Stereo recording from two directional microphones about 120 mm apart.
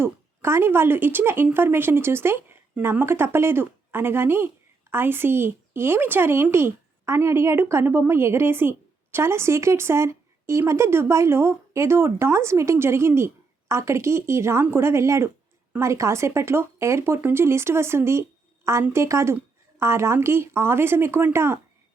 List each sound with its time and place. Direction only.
0.0 s speech: 20° right (ahead or behind)